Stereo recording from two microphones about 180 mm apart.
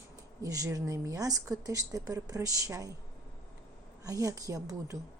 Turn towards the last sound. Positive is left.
turn(degrees=-20)  # may be behind; listen again after turning